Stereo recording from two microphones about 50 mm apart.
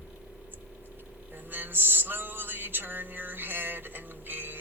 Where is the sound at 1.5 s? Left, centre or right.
Right.